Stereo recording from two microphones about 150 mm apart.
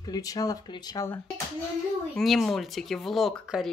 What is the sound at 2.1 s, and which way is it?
Speech, centre (ahead or behind).